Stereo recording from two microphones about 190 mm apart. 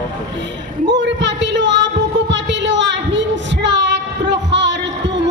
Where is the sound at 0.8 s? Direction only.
70° right (ahead or behind).